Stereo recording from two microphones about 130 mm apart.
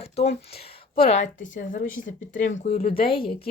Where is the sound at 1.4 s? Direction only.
85° left.